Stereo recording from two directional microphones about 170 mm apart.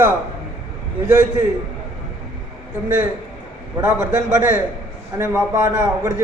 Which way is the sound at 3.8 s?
15° right (ahead or behind).